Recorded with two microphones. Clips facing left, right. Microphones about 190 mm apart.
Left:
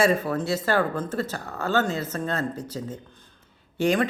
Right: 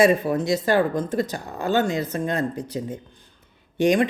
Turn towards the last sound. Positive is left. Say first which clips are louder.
# right 4 dB
turn(degrees=-15)  # may be behind; listen again after turning